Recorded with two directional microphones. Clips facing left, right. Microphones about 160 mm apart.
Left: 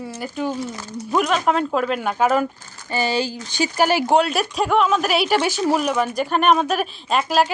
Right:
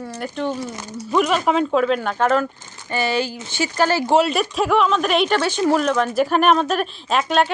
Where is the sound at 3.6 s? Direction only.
15° left (ahead or behind).